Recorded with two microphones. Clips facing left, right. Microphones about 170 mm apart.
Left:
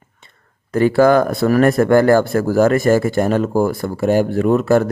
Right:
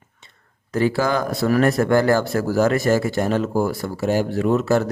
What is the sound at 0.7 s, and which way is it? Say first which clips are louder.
Speech: left 7 dB; 55° left (ahead or behind).